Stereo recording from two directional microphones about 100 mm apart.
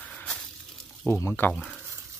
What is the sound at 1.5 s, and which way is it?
Speech, 5° right (ahead or behind).